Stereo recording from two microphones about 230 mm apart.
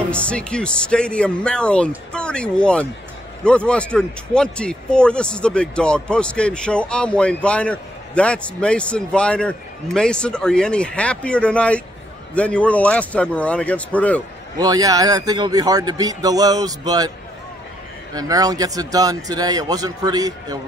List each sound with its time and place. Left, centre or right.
0.1 s speech: centre
14.6 s speech: centre
18.1 s speech: centre